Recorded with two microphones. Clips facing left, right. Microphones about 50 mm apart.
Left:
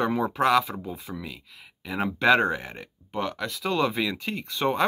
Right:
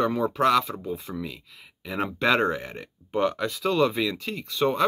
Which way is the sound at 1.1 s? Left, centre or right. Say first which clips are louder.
Right 3 dB; centre.